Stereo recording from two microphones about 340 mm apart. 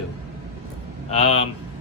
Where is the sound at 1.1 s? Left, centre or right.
Centre.